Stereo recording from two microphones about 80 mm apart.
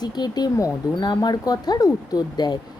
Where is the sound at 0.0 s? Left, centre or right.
Left.